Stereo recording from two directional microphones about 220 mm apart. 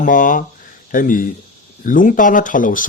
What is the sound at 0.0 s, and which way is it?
Speech, 40° left (ahead or behind).